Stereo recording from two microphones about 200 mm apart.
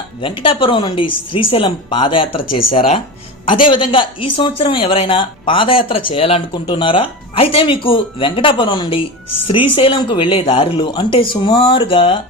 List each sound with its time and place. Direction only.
0.2 s speech: 25° left (ahead or behind)